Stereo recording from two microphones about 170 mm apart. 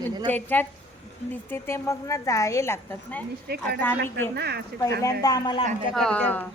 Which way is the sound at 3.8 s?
10° left (ahead or behind).